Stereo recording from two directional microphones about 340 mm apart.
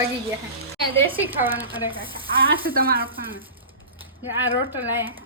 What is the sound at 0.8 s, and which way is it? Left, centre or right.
Speech, centre.